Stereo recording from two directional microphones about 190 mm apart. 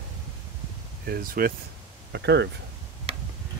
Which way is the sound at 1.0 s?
50° right (ahead or behind).